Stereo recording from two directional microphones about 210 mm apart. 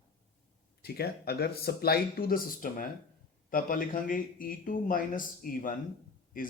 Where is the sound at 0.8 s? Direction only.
50° left (ahead or behind).